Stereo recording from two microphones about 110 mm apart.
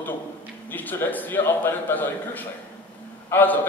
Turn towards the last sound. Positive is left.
turn(degrees=15)  # may be behind; listen again after turning